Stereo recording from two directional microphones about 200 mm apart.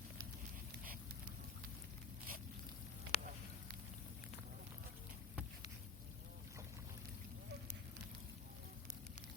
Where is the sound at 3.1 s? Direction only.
35° left (ahead or behind).